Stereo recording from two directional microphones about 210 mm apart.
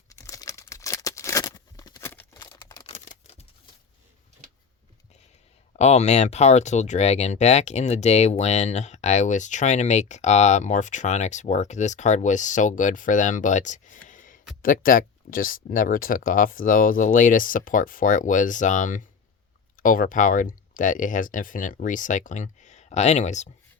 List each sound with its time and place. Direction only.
0.1 s a sound: 15° left (ahead or behind)
2.9 s scissors: 35° left (ahead or behind)
5.7 s speech: 30° left (ahead or behind)